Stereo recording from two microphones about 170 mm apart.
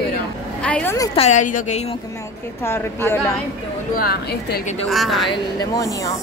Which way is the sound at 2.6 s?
15° left (ahead or behind).